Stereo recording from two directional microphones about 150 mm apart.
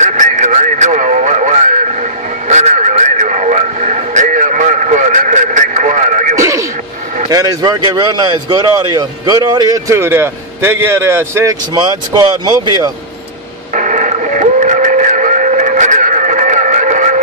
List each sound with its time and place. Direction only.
0.0 s radio: 55° right (ahead or behind)
7.2 s speech: 25° right (ahead or behind)
13.7 s radio: 60° right (ahead or behind)